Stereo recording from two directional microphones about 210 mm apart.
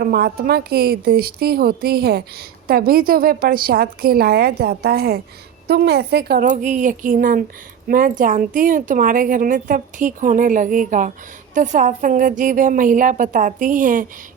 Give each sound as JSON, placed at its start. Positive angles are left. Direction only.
{"t": 0.0, "sound": "a woman's voice", "side_deg": -45}